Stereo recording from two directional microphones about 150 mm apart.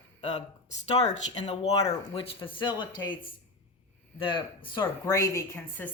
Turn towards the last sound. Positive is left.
turn(degrees=15)  # may be behind; listen again after turning